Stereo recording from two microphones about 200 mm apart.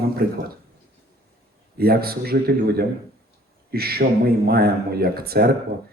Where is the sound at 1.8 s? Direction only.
50° right (ahead or behind).